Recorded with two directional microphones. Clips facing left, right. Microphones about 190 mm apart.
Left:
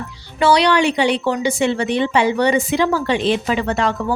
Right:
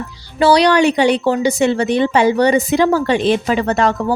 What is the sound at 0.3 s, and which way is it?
A woman's voice, 35° right (ahead or behind).